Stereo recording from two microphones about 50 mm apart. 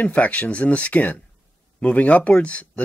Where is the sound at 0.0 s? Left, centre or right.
Left.